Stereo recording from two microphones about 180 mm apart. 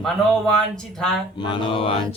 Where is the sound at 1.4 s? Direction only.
25° left (ahead or behind).